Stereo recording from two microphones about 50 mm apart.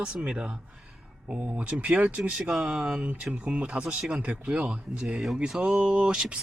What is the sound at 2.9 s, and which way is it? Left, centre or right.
Speech, right.